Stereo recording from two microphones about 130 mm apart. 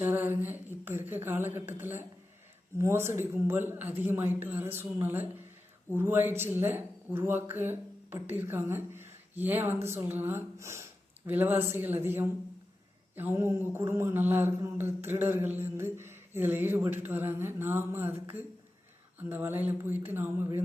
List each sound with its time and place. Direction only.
0.0 s mantra: 15° right (ahead or behind)
19.3 s mantra: 15° right (ahead or behind)